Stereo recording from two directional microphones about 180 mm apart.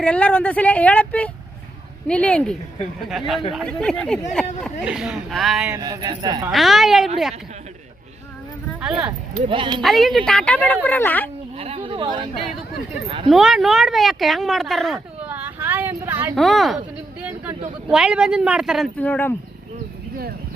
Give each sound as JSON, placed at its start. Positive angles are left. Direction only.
{"t": 0.0, "sound": "speech", "side_deg": 5}
{"t": 5.7, "sound": "speech", "side_deg": -20}
{"t": 6.5, "sound": "speech", "side_deg": 0}
{"t": 9.5, "sound": "speech", "side_deg": -25}
{"t": 9.8, "sound": "speech", "side_deg": 0}
{"t": 11.5, "sound": "a sound", "side_deg": -30}
{"t": 13.1, "sound": "speech", "side_deg": -30}
{"t": 13.3, "sound": "speech", "side_deg": 0}
{"t": 15.3, "sound": "a sound", "side_deg": -10}
{"t": 16.3, "sound": "speech", "side_deg": 0}
{"t": 17.8, "sound": "speech", "side_deg": -5}
{"t": 18.9, "sound": "speech", "side_deg": 10}